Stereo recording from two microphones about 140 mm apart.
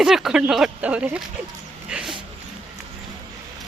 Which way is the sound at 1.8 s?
5° right (ahead or behind).